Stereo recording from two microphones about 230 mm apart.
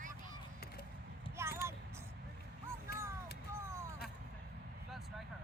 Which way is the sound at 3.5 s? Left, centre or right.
Centre.